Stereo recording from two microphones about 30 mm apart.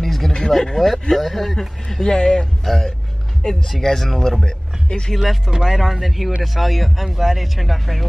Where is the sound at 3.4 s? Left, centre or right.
Left.